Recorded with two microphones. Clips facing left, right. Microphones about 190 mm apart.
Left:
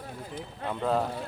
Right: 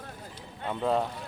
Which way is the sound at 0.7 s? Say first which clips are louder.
Even; centre (ahead or behind).